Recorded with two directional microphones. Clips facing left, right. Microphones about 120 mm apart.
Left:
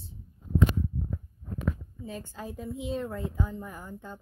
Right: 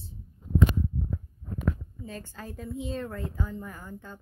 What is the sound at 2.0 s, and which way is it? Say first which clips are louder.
A woman's voice: left 2 dB; 10° left (ahead or behind).